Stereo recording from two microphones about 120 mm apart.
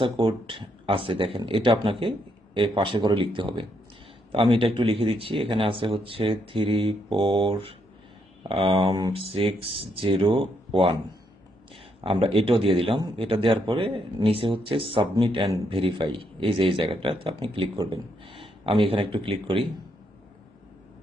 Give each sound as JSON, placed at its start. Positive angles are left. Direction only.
{"t": 0.0, "sound": "speech", "side_deg": -45}
{"t": 9.3, "sound": "speech", "side_deg": -50}
{"t": 12.0, "sound": "speech", "side_deg": -50}